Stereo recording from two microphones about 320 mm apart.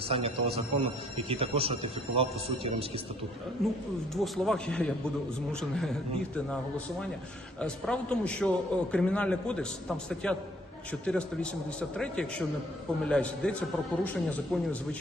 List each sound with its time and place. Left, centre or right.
0.1 s speech: centre
3.6 s a man's voice: centre